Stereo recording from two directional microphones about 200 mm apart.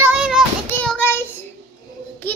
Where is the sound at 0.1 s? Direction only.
5° right (ahead or behind).